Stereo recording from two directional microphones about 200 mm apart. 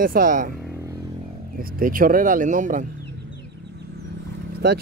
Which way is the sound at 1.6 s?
45° right (ahead or behind).